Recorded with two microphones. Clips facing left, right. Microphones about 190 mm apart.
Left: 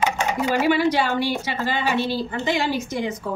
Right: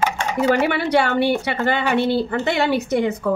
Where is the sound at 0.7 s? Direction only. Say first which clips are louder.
Even; 60° right (ahead or behind).